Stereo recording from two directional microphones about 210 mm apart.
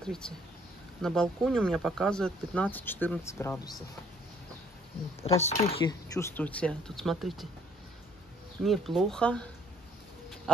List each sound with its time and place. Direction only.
0.0 s speech: 5° left (ahead or behind)
5.4 s speech: 30° left (ahead or behind)
5.9 s speech: 15° left (ahead or behind)
8.6 s speech: centre (ahead or behind)